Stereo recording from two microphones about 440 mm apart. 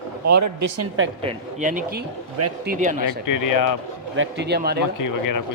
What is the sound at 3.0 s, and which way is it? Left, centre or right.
Speech, left.